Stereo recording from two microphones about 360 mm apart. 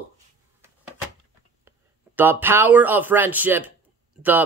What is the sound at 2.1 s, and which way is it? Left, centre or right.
Speech, centre.